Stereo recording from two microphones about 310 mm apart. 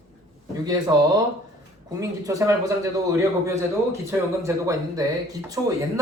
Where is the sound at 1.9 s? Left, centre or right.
Centre.